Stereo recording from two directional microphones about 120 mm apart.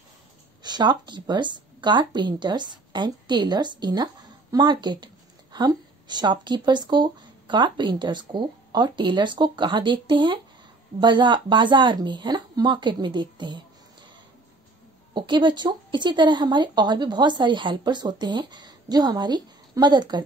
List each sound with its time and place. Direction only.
0.6 s speech: 35° right (ahead or behind)
15.1 s speech: 40° right (ahead or behind)